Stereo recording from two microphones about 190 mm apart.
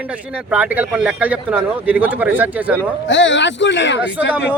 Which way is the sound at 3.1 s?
75° left (ahead or behind).